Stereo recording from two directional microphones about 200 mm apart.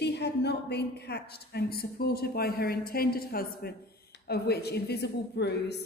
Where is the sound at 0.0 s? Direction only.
55° left (ahead or behind).